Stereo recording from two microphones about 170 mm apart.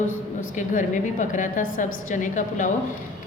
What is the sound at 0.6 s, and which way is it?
A woman's voice, 50° left (ahead or behind).